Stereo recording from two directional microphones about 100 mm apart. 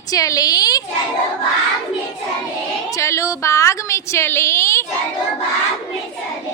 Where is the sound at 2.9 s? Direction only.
30° left (ahead or behind).